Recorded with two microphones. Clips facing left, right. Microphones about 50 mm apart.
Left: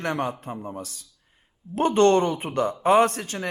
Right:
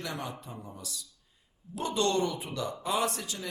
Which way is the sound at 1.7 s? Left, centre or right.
Left.